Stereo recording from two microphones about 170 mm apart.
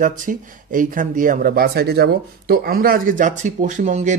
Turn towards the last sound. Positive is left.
turn(degrees=-45)  # may be behind; listen again after turning